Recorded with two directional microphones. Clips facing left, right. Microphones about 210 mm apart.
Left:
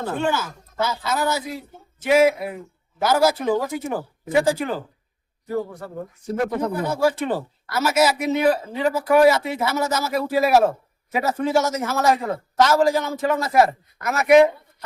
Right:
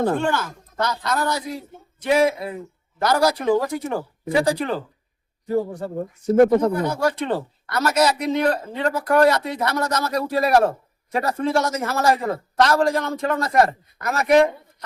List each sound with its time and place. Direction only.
0.2 s speech: 5° left (ahead or behind)
5.5 s speech: 30° right (ahead or behind)
6.8 s speech: 5° left (ahead or behind)